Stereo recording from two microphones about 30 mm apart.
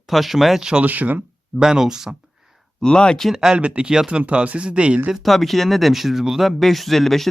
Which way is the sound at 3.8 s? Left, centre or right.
Right.